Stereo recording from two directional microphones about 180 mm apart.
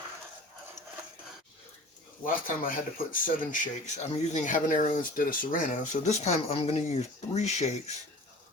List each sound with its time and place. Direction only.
2.2 s speech: 50° left (ahead or behind)